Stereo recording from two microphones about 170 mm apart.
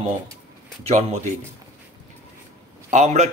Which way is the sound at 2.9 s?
40° right (ahead or behind).